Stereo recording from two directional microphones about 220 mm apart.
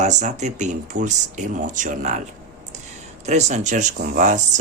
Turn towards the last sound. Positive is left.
turn(degrees=-35)  # may be behind; listen again after turning